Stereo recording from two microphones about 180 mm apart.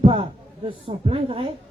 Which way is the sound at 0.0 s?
30° right (ahead or behind).